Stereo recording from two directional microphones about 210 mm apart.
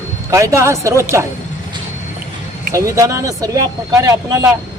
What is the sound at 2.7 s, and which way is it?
Speech, 15° right (ahead or behind).